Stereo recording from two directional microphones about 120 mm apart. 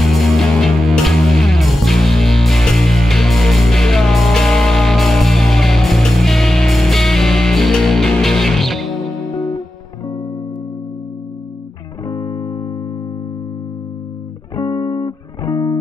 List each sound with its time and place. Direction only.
0.0 s music: centre (ahead or behind)
12.1 s music: 30° left (ahead or behind)
14.5 s music: 30° left (ahead or behind)